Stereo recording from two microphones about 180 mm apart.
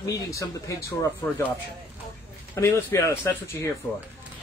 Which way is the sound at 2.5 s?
15° left (ahead or behind).